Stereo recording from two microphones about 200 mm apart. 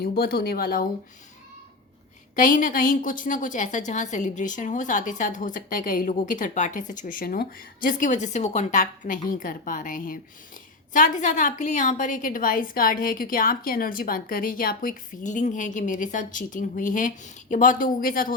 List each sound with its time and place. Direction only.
0.0 s speech: 50° left (ahead or behind)
2.3 s a woman's voice: 40° left (ahead or behind)